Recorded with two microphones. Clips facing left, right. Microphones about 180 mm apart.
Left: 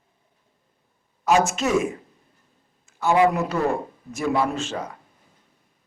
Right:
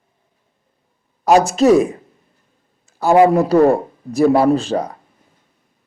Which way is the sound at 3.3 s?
35° right (ahead or behind).